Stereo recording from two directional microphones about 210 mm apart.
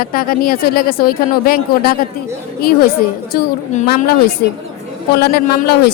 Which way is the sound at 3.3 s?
35° left (ahead or behind).